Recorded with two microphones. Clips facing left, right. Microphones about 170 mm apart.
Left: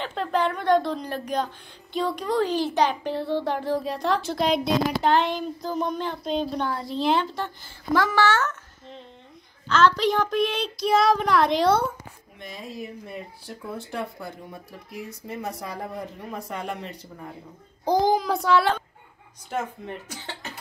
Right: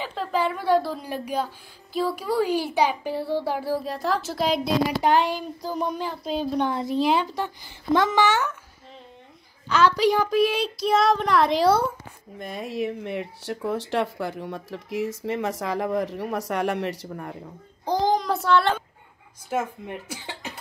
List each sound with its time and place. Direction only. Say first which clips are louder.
0.0 s a child's voice: left 1 dB; 5° right (ahead or behind)
6.6 s a woman's voice: right 3 dB; 20° right (ahead or behind)
7.0 s a child's voice: even; 10° right (ahead or behind)
9.7 s speech: right 1 dB; 10° right (ahead or behind)
12.4 s speech: right 7 dB; 55° right (ahead or behind); by 17.3 s 85° right
17.8 s speech: left 1 dB; 10° left (ahead or behind)
19.5 s a child's voice: right 3 dB; 10° right (ahead or behind)